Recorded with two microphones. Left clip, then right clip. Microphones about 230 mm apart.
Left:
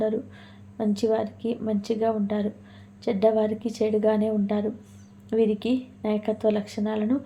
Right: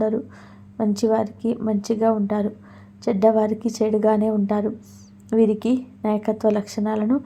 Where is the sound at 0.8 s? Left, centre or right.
Right.